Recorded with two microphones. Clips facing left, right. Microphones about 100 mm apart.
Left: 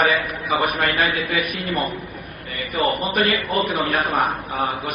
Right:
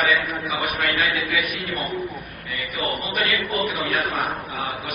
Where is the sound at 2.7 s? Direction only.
35° left (ahead or behind).